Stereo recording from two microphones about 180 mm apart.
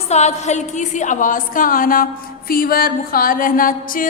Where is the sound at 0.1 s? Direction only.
40° left (ahead or behind).